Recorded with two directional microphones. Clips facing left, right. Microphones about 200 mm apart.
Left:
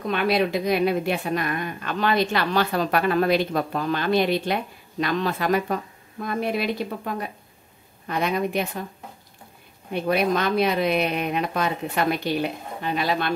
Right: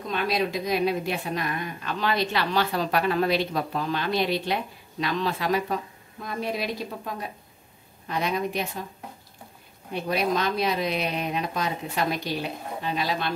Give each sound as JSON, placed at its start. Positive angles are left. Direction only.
{"t": 0.0, "sound": "a woman's voice", "side_deg": 65}
{"t": 10.0, "sound": "a woman's voice", "side_deg": 60}